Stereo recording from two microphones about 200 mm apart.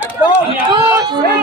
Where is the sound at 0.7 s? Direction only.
15° right (ahead or behind).